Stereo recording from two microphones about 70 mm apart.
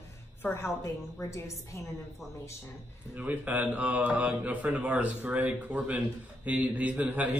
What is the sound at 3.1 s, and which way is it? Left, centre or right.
A man's voice, right.